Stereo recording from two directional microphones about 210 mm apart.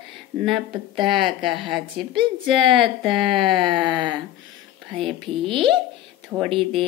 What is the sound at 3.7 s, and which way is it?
Speech, 20° right (ahead or behind).